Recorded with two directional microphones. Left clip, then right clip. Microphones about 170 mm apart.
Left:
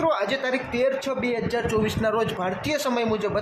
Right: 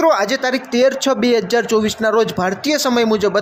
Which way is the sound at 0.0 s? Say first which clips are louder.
Right 9 dB; 40° right (ahead or behind).